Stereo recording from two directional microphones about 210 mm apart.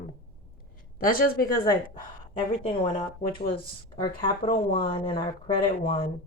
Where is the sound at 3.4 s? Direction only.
25° left (ahead or behind).